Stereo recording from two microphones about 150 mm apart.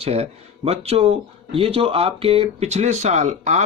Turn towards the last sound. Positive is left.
turn(degrees=-50)  # may be behind; listen again after turning